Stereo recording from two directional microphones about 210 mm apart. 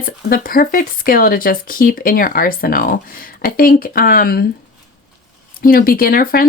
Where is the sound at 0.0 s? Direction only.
45° left (ahead or behind).